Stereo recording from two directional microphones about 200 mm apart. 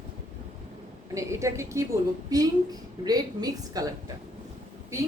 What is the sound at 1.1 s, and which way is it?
A woman's voice, 15° right (ahead or behind).